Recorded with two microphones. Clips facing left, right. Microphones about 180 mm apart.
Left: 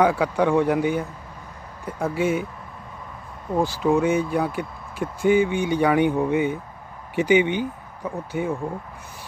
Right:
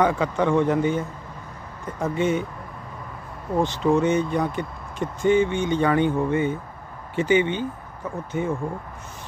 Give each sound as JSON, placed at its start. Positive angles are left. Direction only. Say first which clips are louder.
{"t": 0.0, "sound": "speech", "louder": "left 2 dB", "side_deg": 10}
{"t": 3.5, "sound": "speech", "louder": "even", "side_deg": 0}